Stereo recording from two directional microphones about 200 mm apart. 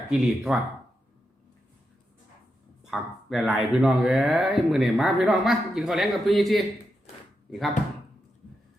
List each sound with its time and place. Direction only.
0.1 s speech: 5° right (ahead or behind)
2.8 s speech: centre (ahead or behind)